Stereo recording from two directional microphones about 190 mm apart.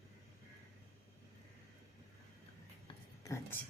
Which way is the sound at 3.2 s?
15° left (ahead or behind).